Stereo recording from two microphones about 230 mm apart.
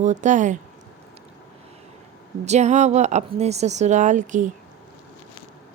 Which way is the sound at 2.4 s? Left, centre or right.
Right.